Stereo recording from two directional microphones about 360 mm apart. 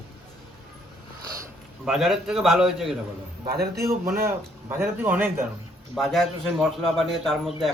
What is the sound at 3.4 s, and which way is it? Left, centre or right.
Speech, right.